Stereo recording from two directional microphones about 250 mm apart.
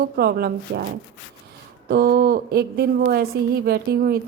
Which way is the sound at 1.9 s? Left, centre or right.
Right.